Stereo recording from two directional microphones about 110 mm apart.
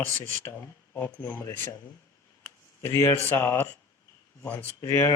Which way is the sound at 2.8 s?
25° left (ahead or behind).